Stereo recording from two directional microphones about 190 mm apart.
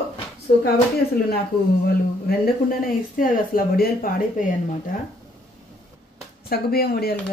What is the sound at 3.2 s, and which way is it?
Speech, 50° left (ahead or behind).